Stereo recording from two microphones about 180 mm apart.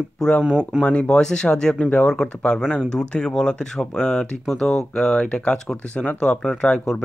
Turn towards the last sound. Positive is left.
turn(degrees=5)  # may be behind; listen again after turning